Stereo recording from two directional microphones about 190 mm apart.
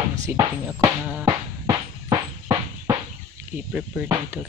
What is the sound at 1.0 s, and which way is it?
Music, 5° right (ahead or behind).